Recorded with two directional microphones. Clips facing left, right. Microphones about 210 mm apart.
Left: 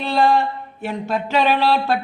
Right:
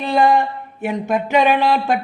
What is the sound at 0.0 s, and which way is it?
Speech, 15° right (ahead or behind).